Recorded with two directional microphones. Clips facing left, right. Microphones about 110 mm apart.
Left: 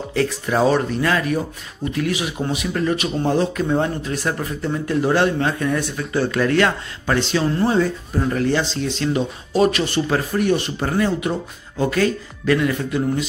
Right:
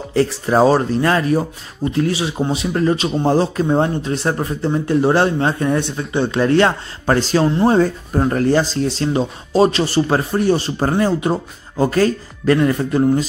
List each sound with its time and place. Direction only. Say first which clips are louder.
0.1 s speech: right 5 dB; 35° right (ahead or behind)